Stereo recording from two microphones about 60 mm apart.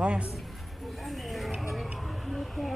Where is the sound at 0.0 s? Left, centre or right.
Centre.